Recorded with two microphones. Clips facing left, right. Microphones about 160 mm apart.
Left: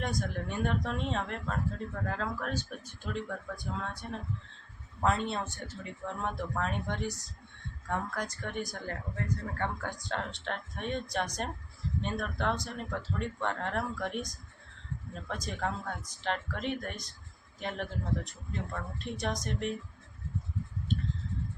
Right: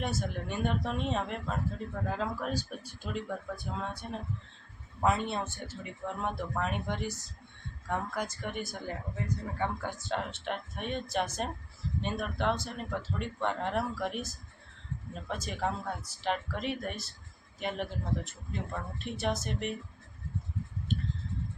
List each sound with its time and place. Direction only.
0.0 s speech: 5° right (ahead or behind)